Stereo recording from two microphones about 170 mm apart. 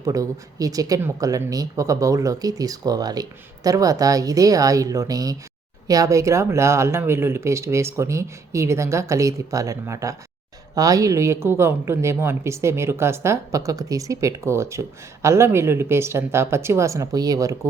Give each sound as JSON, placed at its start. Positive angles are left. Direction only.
{"t": 0.0, "sound": "a woman's voice", "side_deg": -20}